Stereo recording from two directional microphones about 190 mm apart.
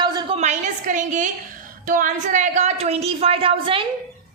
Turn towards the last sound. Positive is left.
turn(degrees=-30)  # may be behind; listen again after turning